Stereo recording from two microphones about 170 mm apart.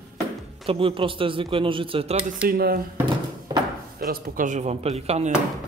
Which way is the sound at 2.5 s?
60° right (ahead or behind).